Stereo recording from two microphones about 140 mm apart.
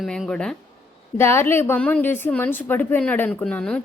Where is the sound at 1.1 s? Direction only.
20° left (ahead or behind).